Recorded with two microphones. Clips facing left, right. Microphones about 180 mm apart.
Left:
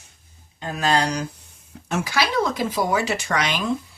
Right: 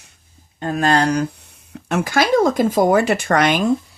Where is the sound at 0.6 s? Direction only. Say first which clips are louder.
Right 5 dB; 50° right (ahead or behind).